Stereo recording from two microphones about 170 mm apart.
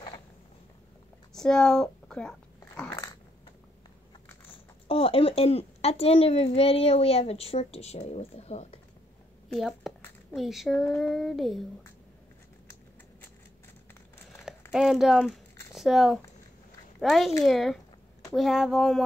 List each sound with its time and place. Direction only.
1.3 s speech: 5° left (ahead or behind)
2.9 s dog: 20° left (ahead or behind)
4.8 s a woman's voice: 35° left (ahead or behind)
9.5 s speech: centre (ahead or behind)
14.7 s speech: 5° right (ahead or behind)